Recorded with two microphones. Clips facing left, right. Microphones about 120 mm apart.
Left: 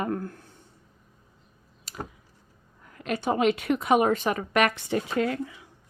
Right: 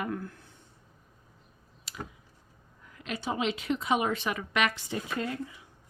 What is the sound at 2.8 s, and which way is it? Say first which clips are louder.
A woman's voice: left 7 dB; 50° left (ahead or behind).